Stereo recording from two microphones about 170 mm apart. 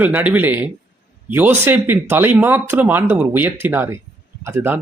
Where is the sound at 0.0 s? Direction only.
10° right (ahead or behind).